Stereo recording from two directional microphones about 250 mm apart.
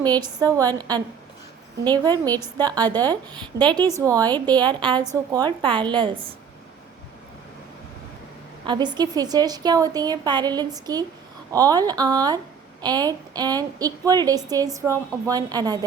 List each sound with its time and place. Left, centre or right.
0.0 s a woman's voice: centre
8.6 s a woman's voice: centre